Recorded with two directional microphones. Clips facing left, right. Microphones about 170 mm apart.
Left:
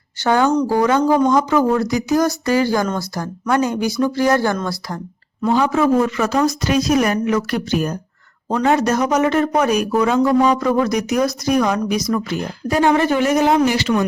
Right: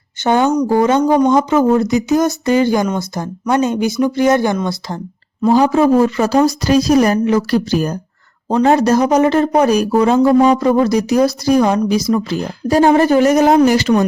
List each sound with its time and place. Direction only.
0.3 s speech: 20° right (ahead or behind)
5.5 s speech: 35° right (ahead or behind)